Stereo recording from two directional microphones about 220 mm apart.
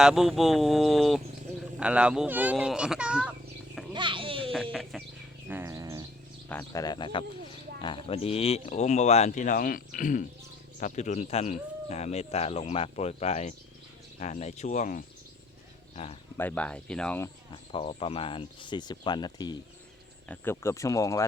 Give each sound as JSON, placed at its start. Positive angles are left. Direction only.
{"t": 0.0, "sound": "speech", "side_deg": 0}
{"t": 3.9, "sound": "a sound", "side_deg": -20}
{"t": 4.5, "sound": "speech", "side_deg": 0}
{"t": 5.5, "sound": "bird", "side_deg": -10}
{"t": 6.5, "sound": "speech", "side_deg": 10}
{"t": 16.4, "sound": "speech", "side_deg": 5}
{"t": 17.5, "sound": "speech", "side_deg": 25}
{"t": 20.2, "sound": "speech", "side_deg": 10}